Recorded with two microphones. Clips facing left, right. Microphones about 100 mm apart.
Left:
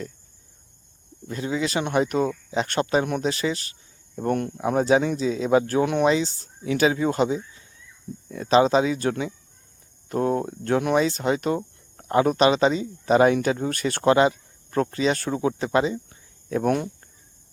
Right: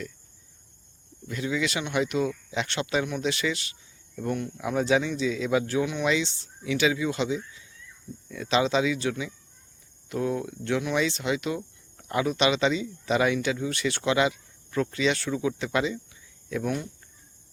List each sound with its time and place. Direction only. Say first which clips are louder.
1.3 s speech: left 3 dB; 35° left (ahead or behind)
4.5 s speech: left 4 dB; 35° left (ahead or behind); by 6.1 s 55° left (ahead or behind)
6.1 s speech: left 4 dB; 40° left (ahead or behind)
16.6 s speech: left 8 dB; 55° left (ahead or behind)